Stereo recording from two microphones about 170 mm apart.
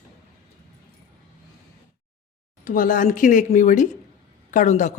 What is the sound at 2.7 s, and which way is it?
Speech, 50° left (ahead or behind).